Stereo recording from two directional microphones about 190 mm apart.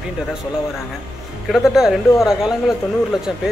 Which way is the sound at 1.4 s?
Centre (ahead or behind).